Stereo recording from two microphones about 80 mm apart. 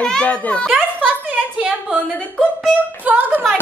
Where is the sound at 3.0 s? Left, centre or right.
Right.